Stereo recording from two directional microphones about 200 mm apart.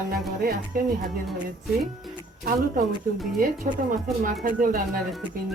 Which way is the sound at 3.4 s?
45° right (ahead or behind).